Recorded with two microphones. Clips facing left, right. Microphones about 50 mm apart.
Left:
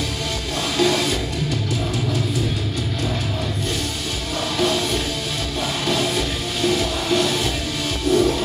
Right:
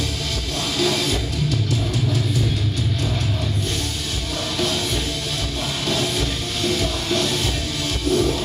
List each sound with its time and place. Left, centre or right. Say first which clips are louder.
0.7 s music: left 3 dB; centre
4.6 s music: left 4 dB; centre
5.9 s music: left 1 dB; centre